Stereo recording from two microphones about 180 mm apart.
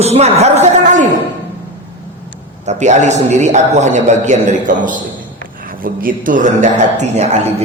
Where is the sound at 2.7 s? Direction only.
40° right (ahead or behind).